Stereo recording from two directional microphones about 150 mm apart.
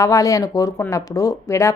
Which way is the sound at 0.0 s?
20° left (ahead or behind).